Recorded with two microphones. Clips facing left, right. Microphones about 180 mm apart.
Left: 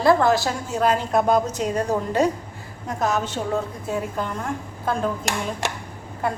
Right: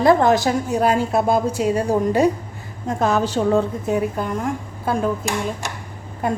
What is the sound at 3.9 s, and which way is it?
Speech, 15° right (ahead or behind).